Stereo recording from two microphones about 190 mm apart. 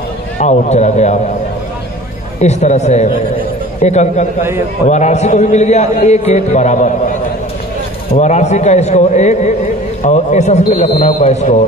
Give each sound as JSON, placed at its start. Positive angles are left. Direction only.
{"t": 0.4, "sound": "a man's voice", "side_deg": 35}
{"t": 2.4, "sound": "a man's voice", "side_deg": 35}
{"t": 4.4, "sound": "a man's voice", "side_deg": -15}
{"t": 4.8, "sound": "a man's voice", "side_deg": 35}